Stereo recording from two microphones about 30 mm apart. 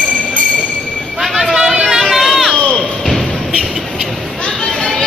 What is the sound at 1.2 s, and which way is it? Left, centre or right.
Vehicle, centre.